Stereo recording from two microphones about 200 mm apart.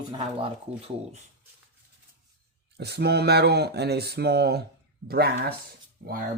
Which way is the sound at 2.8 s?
55° right (ahead or behind).